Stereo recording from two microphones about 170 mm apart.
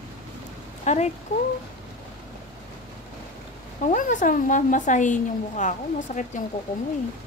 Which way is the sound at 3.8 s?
50° left (ahead or behind).